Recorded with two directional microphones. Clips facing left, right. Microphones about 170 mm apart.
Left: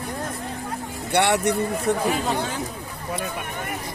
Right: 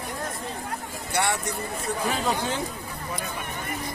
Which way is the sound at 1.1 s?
70° left (ahead or behind).